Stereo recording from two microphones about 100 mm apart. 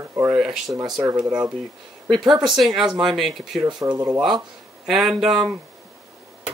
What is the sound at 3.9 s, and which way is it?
Speech, 30° right (ahead or behind).